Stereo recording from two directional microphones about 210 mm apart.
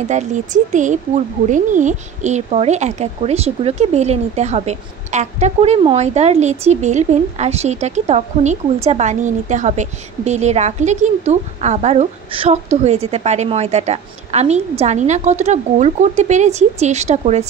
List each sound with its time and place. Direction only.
0.1 s a woman's voice: 35° right (ahead or behind)